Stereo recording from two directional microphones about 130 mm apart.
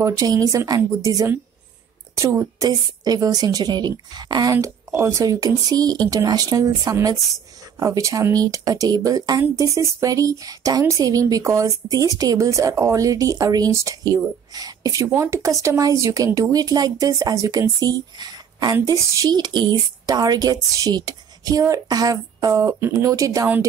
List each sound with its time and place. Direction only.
0.0 s speech: 25° right (ahead or behind)